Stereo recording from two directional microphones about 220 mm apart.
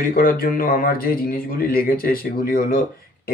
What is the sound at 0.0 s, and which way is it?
Speech, 40° left (ahead or behind).